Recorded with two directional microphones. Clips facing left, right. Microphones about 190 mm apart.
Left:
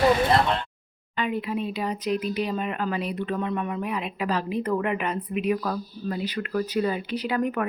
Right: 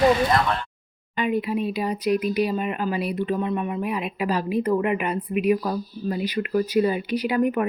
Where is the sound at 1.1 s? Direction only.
15° right (ahead or behind).